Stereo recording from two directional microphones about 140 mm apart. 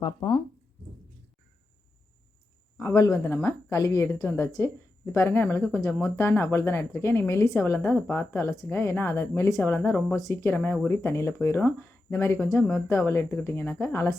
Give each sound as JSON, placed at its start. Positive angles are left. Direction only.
{"t": 0.0, "sound": "speech", "side_deg": 40}
{"t": 2.7, "sound": "a woman's voice", "side_deg": 25}